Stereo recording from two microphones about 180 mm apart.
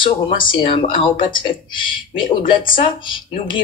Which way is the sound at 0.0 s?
25° left (ahead or behind).